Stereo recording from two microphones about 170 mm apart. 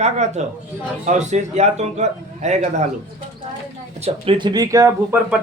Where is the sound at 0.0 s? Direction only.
40° right (ahead or behind).